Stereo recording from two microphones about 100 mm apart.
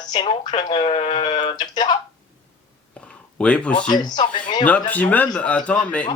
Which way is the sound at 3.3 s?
10° left (ahead or behind).